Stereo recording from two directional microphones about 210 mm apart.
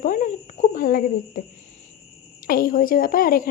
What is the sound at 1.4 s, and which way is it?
Speech, 45° left (ahead or behind).